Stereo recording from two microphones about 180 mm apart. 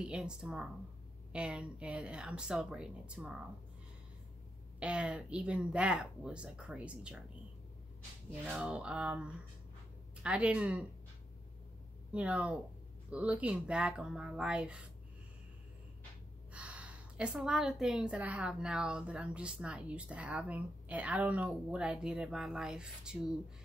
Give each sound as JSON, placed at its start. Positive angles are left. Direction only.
{"t": 0.0, "sound": "a woman's voice", "side_deg": -5}
{"t": 4.7, "sound": "a woman's voice", "side_deg": -5}
{"t": 8.5, "sound": "a woman's voice", "side_deg": -5}
{"t": 12.1, "sound": "a woman's voice", "side_deg": -5}
{"t": 16.5, "sound": "a woman's voice", "side_deg": -5}